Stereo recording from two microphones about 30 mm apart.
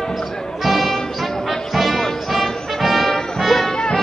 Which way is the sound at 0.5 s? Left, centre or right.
Centre.